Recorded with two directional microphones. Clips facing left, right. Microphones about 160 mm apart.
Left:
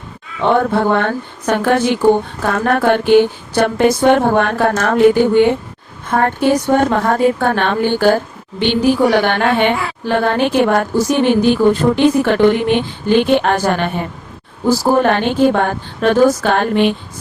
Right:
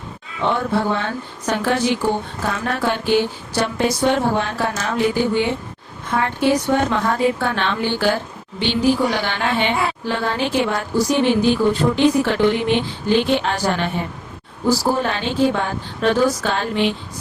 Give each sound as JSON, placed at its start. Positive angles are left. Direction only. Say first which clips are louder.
{"t": 0.4, "sound": "a woman's voice", "louder": "left 6 dB", "side_deg": 55}